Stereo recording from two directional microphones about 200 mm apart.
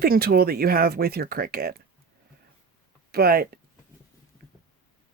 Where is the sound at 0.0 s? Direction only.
50° right (ahead or behind).